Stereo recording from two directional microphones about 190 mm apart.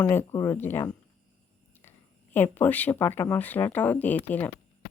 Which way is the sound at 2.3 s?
10° left (ahead or behind).